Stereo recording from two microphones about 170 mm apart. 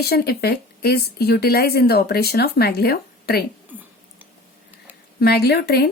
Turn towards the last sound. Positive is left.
turn(degrees=70)  # may be behind; listen again after turning